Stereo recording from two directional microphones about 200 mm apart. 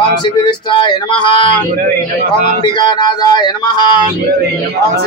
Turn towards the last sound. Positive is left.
turn(degrees=20)  # may be behind; listen again after turning